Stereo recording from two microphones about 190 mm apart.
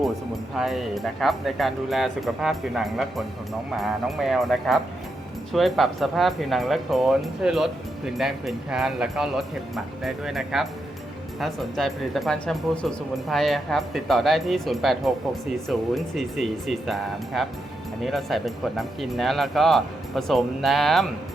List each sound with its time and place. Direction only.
0.5 s speech: centre (ahead or behind)